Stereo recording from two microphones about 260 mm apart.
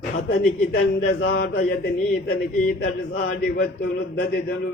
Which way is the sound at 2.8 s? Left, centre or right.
Left.